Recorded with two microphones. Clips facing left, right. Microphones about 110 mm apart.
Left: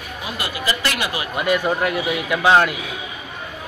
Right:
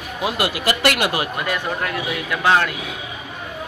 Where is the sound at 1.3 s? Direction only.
10° left (ahead or behind).